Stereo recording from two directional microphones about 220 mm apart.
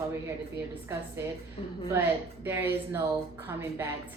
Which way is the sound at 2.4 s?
10° right (ahead or behind).